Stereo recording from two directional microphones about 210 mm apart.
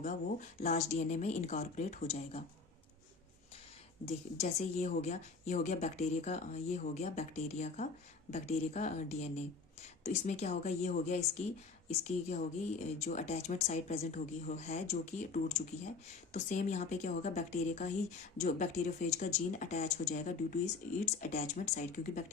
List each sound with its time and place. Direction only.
0.0 s a woman's voice: 35° left (ahead or behind)
4.0 s a woman's voice: 30° left (ahead or behind)